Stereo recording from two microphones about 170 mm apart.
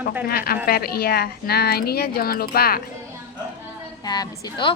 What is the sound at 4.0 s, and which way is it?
Speech, 25° left (ahead or behind).